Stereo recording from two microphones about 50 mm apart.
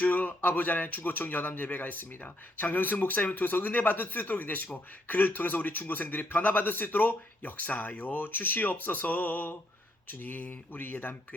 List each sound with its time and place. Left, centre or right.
0.0 s a man's voice: left